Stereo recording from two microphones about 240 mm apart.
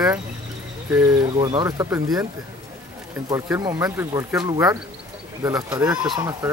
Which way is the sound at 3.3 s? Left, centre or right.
Centre.